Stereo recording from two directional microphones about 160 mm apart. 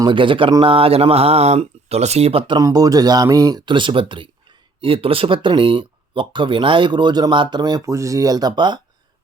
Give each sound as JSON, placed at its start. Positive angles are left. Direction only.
{"t": 0.0, "sound": "speech", "side_deg": -30}
{"t": 2.6, "sound": "speech", "side_deg": -20}